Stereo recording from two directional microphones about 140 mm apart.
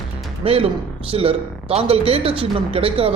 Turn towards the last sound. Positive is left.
turn(degrees=-40)  # may be behind; listen again after turning